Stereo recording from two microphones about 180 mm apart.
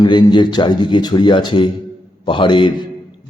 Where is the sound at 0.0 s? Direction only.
25° left (ahead or behind).